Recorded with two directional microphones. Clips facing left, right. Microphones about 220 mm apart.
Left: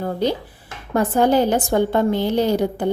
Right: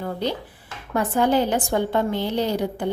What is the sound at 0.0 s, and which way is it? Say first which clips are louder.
Speech: left 5 dB; 40° left (ahead or behind).